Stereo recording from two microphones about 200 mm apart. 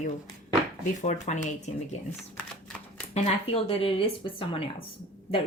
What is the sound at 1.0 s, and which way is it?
Speech, 35° left (ahead or behind).